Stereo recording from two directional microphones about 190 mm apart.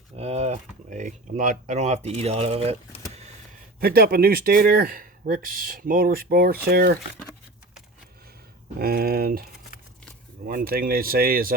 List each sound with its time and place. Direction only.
0.2 s speech: 35° right (ahead or behind)
3.8 s speech: 55° right (ahead or behind)
8.8 s speech: 50° right (ahead or behind)
10.4 s speech: 50° right (ahead or behind)